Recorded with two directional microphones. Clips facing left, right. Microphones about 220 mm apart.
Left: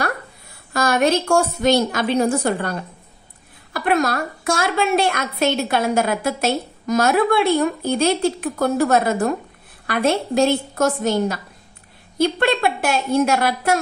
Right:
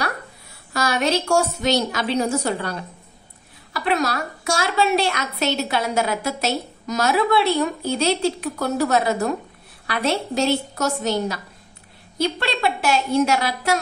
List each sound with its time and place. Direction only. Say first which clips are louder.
0.7 s a woman's voice: left 4 dB; 50° left (ahead or behind)